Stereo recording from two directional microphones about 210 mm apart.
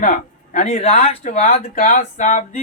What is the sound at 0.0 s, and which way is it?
Speech, 35° left (ahead or behind).